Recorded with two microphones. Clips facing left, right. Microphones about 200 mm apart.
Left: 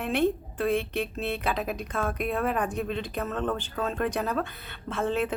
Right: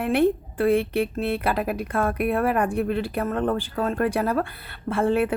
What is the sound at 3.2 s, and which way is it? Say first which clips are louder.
Speech: right 4 dB; 55° right (ahead or behind).